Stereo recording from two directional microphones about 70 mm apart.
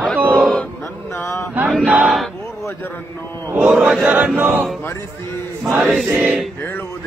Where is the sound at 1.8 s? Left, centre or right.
Centre.